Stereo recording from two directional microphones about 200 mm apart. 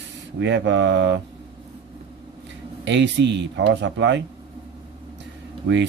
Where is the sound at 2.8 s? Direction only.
60° right (ahead or behind).